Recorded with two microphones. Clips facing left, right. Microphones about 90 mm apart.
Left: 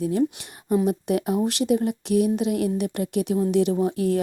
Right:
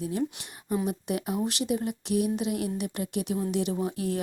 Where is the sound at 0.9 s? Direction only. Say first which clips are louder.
Left 7 dB; 60° left (ahead or behind).